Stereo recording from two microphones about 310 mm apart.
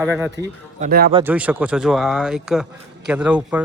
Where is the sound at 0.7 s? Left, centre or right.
Right.